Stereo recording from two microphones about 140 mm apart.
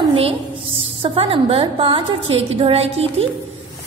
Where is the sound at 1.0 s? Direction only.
40° right (ahead or behind).